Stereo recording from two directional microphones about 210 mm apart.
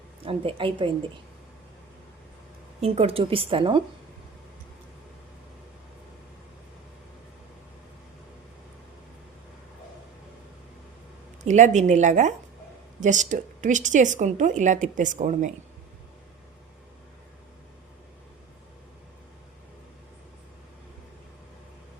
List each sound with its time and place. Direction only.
0.2 s a woman's voice: 25° right (ahead or behind)
2.8 s a woman's voice: 30° right (ahead or behind)
11.4 s a woman's voice: 35° right (ahead or behind)